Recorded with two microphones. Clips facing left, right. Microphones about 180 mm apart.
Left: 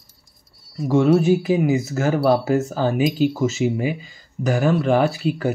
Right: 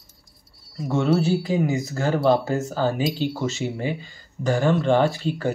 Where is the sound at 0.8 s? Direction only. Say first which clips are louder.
Left 5 dB; 5° left (ahead or behind).